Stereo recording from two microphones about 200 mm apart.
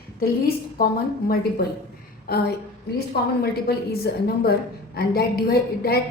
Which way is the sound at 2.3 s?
55° left (ahead or behind).